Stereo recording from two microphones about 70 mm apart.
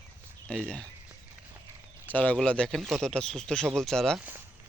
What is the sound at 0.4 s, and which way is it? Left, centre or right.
Speech, centre.